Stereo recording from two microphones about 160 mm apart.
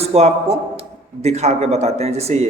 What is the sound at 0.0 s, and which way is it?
A man's voice, 40° right (ahead or behind).